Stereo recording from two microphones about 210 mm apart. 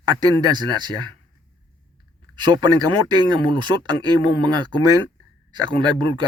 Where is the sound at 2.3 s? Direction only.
20° right (ahead or behind).